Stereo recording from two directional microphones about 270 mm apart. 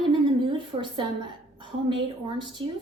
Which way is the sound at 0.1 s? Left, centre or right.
Centre.